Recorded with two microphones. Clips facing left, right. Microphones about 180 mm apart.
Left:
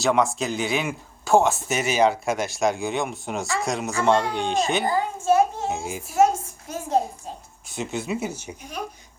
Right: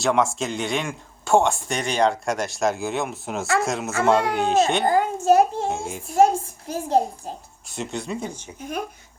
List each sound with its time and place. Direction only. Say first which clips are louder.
0.0 s speech: even; centre (ahead or behind)
4.9 s child singing: right 3 dB; 45° right (ahead or behind)
5.6 s a child's voice: right 1 dB; 5° left (ahead or behind)
6.1 s a sound: right 2 dB; 35° right (ahead or behind)
7.7 s speech: left 1 dB; centre (ahead or behind)